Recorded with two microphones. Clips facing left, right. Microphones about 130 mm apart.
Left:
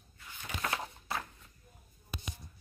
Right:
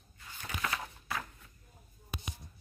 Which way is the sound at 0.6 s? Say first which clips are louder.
Left 1 dB; 30° left (ahead or behind).